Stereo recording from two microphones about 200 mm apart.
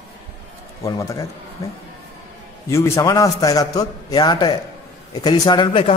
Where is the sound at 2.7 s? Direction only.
15° left (ahead or behind).